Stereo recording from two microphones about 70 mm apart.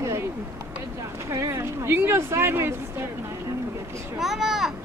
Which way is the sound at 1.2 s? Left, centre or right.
Right.